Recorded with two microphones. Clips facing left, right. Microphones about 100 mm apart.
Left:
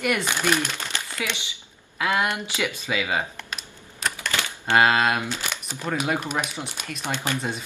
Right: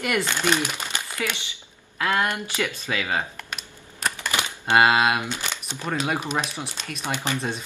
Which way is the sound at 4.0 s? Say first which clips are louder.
Right 1 dB; 15° right (ahead or behind).